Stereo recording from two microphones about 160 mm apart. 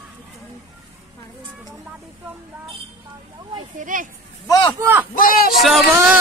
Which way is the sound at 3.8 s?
55° right (ahead or behind).